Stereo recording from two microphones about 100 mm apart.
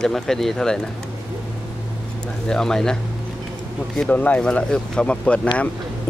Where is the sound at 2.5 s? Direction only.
5° left (ahead or behind).